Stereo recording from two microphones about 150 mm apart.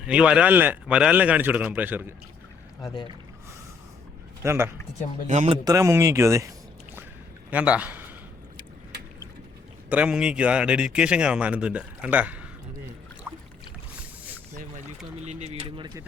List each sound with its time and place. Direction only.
0.0 s a man's voice: 5° right (ahead or behind)
2.8 s speech: 30° left (ahead or behind)
4.4 s a man's voice: 15° right (ahead or behind)
5.3 s a man's voice: 50° right (ahead or behind)
5.6 s speech: 20° right (ahead or behind)
7.5 s a man's voice: 10° right (ahead or behind)
9.9 s a man's voice: 10° right (ahead or behind)
15.3 s speech: 50° right (ahead or behind)